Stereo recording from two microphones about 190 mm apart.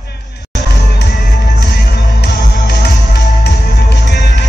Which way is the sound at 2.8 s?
60° left (ahead or behind).